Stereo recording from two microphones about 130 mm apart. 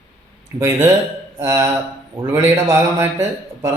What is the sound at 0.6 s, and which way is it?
A man's voice, 20° right (ahead or behind).